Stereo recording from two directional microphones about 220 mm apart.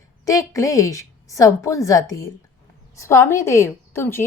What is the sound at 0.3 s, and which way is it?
A woman's voice, 15° left (ahead or behind).